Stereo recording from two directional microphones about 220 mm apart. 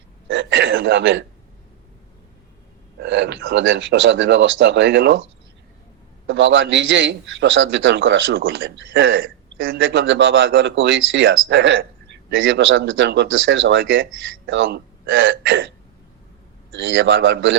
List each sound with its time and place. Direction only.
0.3 s a sound: 55° right (ahead or behind)
3.0 s a man's voice: 55° right (ahead or behind)
6.2 s a man's voice: 55° right (ahead or behind)
16.7 s a man's voice: 55° right (ahead or behind)